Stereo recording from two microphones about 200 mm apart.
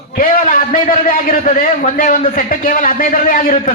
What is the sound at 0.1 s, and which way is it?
A man's voice, 45° left (ahead or behind).